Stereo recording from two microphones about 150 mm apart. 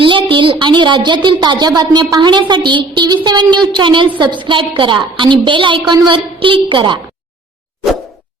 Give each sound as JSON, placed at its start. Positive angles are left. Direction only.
{"t": 0.0, "sound": "a woman's voice", "side_deg": -35}